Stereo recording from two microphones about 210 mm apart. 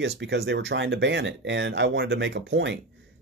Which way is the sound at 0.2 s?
55° right (ahead or behind).